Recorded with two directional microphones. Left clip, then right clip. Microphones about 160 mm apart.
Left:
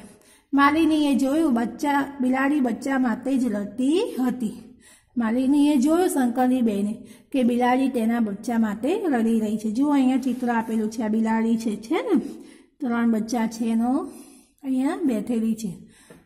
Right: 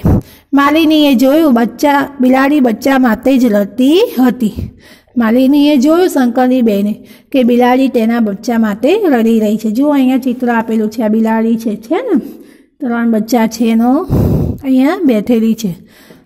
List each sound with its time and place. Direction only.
0.6 s a woman's voice: 35° right (ahead or behind)